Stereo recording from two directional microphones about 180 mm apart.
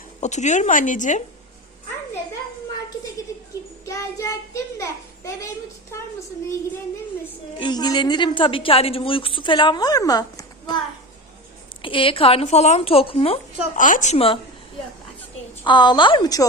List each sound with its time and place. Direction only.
0.2 s speech: 40° left (ahead or behind)
3.8 s child singing: 20° left (ahead or behind)
7.6 s a woman's voice: 25° left (ahead or behind)
11.8 s speech: 30° left (ahead or behind)
13.7 s speech: 45° left (ahead or behind)
15.6 s a woman's voice: 25° left (ahead or behind)